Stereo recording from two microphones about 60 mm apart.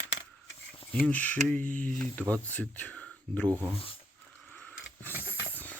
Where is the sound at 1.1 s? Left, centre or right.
Left.